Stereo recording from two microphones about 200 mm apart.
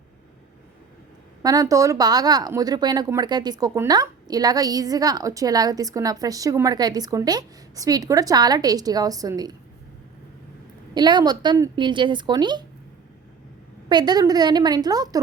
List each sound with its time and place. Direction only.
1.4 s a woman's voice: 15° right (ahead or behind)
10.9 s a woman's voice: 20° right (ahead or behind)
13.8 s a woman's voice: 20° right (ahead or behind)